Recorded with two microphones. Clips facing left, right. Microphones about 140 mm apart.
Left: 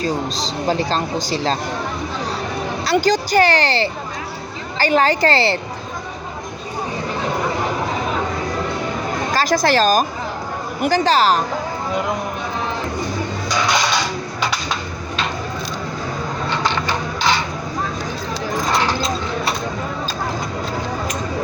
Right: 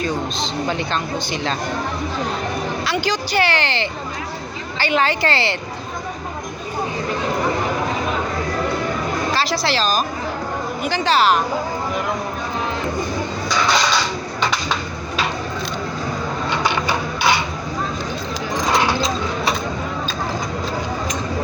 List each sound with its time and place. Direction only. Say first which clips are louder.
0.0 s speech: left 1 dB; 35° left (ahead or behind)
2.8 s speech: left 9 dB; 40° left (ahead or behind)
9.3 s speech: left 7 dB; 45° left (ahead or behind)
16.5 s a sound: right 1 dB; 10° right (ahead or behind)